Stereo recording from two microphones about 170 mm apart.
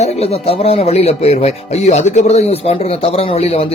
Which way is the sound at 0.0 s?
35° left (ahead or behind).